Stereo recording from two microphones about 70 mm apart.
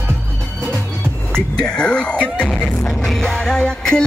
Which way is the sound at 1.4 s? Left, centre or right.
Centre.